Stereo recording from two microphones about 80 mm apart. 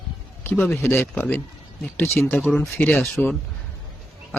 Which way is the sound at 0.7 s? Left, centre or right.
Left.